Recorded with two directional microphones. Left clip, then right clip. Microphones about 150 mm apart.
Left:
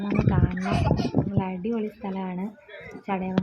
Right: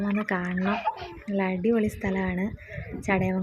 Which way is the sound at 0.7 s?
20° left (ahead or behind).